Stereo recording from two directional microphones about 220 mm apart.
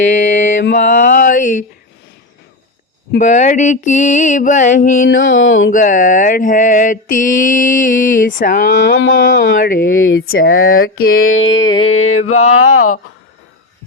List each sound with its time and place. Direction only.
0.1 s mantra: 35° left (ahead or behind)
0.8 s a sound: 40° left (ahead or behind)
3.2 s mantra: 35° left (ahead or behind)
5.0 s music: 60° left (ahead or behind)
5.7 s mantra: 35° left (ahead or behind)
8.7 s music: 55° left (ahead or behind)
9.6 s mantra: 40° left (ahead or behind)
9.8 s music: 60° left (ahead or behind)
10.2 s speech: 65° left (ahead or behind)
10.8 s music: 70° left (ahead or behind)
11.5 s music: 15° left (ahead or behind)
11.8 s speech: 70° left (ahead or behind)
12.3 s mantra: 35° left (ahead or behind)
12.5 s speech: 80° left